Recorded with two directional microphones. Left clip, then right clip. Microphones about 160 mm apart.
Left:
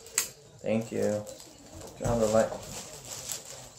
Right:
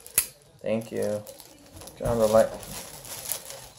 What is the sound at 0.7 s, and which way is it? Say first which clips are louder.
Speech: right 2 dB; 25° right (ahead or behind).